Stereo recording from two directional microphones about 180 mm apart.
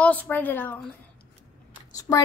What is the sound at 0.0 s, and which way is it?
Speech, 10° left (ahead or behind).